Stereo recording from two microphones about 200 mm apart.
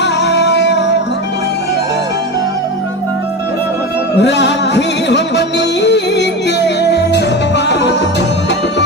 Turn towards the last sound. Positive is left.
turn(degrees=60)  # may be behind; listen again after turning